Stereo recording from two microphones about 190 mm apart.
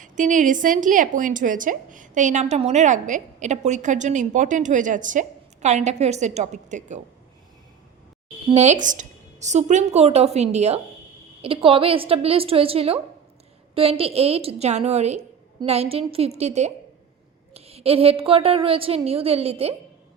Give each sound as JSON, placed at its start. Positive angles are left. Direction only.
{"t": 0.0, "sound": "a woman's voice", "side_deg": -40}
{"t": 8.4, "sound": "a woman's voice", "side_deg": -35}